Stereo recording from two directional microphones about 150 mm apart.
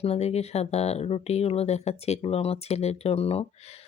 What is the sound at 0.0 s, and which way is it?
Speech, 45° left (ahead or behind).